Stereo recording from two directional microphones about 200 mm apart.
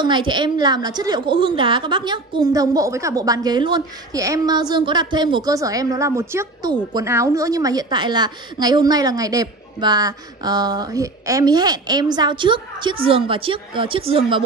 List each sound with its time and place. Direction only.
0.0 s a woman's voice: 20° right (ahead or behind)